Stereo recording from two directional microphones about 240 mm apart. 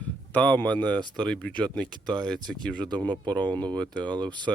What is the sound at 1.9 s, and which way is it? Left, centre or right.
Speech, centre.